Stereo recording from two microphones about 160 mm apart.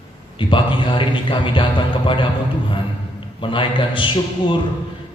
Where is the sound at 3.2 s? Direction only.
30° left (ahead or behind).